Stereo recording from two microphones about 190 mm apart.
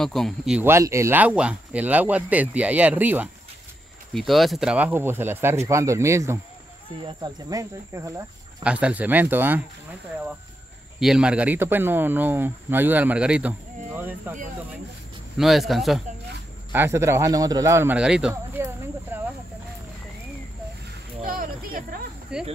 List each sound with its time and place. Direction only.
0.0 s a man's voice: centre (ahead or behind)
0.6 s speech: 15° right (ahead or behind)
8.6 s speech: 5° right (ahead or behind)
11.0 s speech: 5° right (ahead or behind)
15.3 s a man's voice: centre (ahead or behind)
16.7 s speech: 15° right (ahead or behind)
18.6 s a sound: 15° right (ahead or behind)
21.2 s a sound: 45° right (ahead or behind)
22.3 s a man's voice: 5° right (ahead or behind)